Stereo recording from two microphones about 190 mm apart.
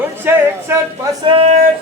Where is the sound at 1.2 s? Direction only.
30° right (ahead or behind).